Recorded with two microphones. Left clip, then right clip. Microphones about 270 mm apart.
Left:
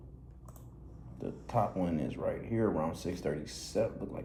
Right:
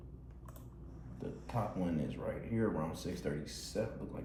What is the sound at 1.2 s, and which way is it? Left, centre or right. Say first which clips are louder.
Speech: left 8 dB; centre.